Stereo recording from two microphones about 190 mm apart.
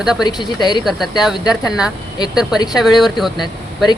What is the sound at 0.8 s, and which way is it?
Speech, centre (ahead or behind).